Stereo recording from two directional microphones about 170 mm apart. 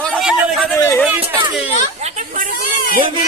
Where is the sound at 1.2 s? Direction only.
30° right (ahead or behind).